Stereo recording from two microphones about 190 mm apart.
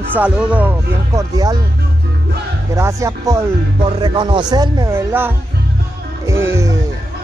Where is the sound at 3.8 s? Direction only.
30° right (ahead or behind).